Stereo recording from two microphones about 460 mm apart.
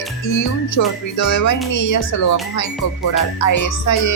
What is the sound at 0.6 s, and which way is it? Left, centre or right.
Speech, left.